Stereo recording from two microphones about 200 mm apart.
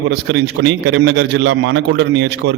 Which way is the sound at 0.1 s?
60° right (ahead or behind).